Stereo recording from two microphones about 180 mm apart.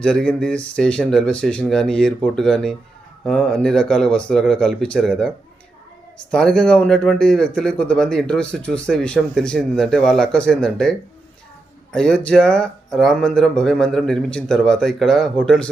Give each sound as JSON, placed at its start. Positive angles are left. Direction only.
{"t": 0.0, "sound": "speech", "side_deg": 5}